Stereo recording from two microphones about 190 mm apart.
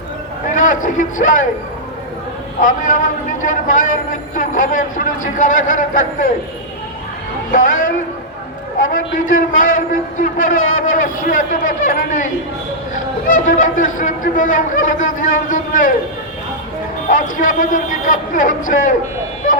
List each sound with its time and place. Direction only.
0.4 s a man's voice: 40° left (ahead or behind)
2.6 s a man's voice: 45° left (ahead or behind)
7.5 s a man's voice: 45° left (ahead or behind)
17.1 s a man's voice: 45° left (ahead or behind)